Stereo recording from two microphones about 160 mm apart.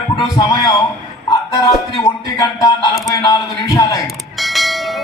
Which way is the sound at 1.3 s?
25° left (ahead or behind).